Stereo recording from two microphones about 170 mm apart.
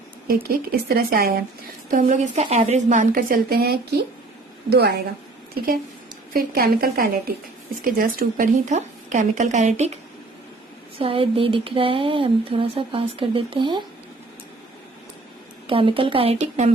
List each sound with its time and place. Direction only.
0.3 s speech: 60° right (ahead or behind)
1.9 s a woman's voice: 50° right (ahead or behind); by 4.9 s 70° right (ahead or behind)
6.3 s a woman's voice: 60° right (ahead or behind); by 9.9 s 40° right (ahead or behind)
10.9 s speech: 35° right (ahead or behind)
15.6 s speech: 30° right (ahead or behind)